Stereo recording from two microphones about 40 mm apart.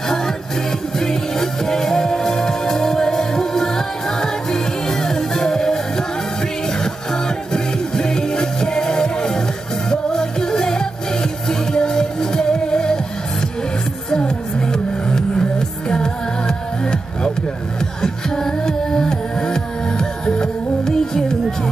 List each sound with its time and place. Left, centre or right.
0.1 s music: centre
14.1 s a sound: centre
15.9 s music: centre